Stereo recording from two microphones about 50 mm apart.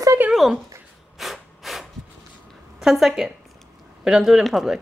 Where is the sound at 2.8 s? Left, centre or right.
Centre.